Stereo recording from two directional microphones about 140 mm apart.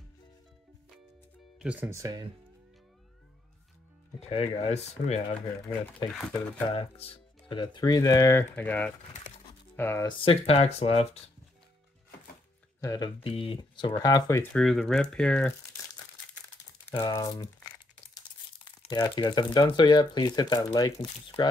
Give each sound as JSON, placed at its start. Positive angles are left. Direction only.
{"t": 1.6, "sound": "speech", "side_deg": -10}
{"t": 1.9, "sound": "speech", "side_deg": -25}
{"t": 4.3, "sound": "speech", "side_deg": 40}
{"t": 6.0, "sound": "speech", "side_deg": 5}
{"t": 6.7, "sound": "speech", "side_deg": 45}
{"t": 10.0, "sound": "speech", "side_deg": 40}
{"t": 12.8, "sound": "speech", "side_deg": 30}
{"t": 13.2, "sound": "speech", "side_deg": 40}
{"t": 14.4, "sound": "speech", "side_deg": 5}
{"t": 16.9, "sound": "speech", "side_deg": 30}